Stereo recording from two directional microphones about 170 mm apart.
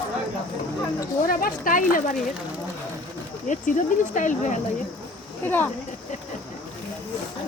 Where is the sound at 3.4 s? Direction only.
45° left (ahead or behind).